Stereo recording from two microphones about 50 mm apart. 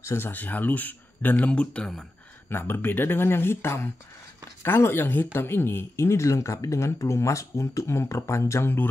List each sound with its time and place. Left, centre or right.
0.2 s speech: left
2.5 s speech: left
5.9 s speech: left